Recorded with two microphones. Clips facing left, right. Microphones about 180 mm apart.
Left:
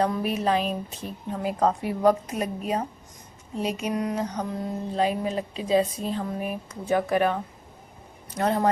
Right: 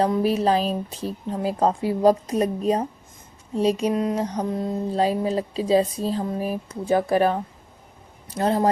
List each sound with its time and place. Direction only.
0.0 s mantra: 30° right (ahead or behind)
8.4 s mantra: 30° right (ahead or behind)